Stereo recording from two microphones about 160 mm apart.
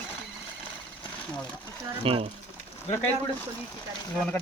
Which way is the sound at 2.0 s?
35° right (ahead or behind).